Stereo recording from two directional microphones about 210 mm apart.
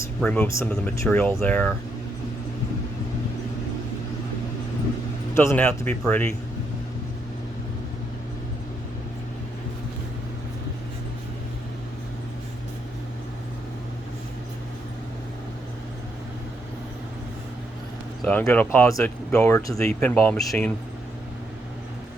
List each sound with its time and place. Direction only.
0.2 s speech: 5° left (ahead or behind)
5.3 s speech: 10° left (ahead or behind)
18.2 s speech: 5° left (ahead or behind)